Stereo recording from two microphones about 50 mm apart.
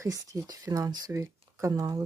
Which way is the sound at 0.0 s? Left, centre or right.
Right.